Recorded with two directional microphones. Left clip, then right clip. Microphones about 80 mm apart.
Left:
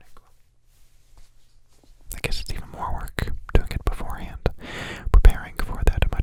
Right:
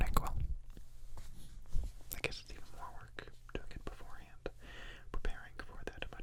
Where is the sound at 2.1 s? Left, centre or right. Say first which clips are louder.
Left 11 dB; left.